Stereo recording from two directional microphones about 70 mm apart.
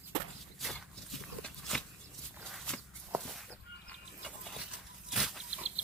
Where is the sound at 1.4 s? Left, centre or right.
Centre.